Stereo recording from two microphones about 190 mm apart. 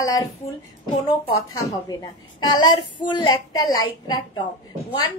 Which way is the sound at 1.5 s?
20° left (ahead or behind).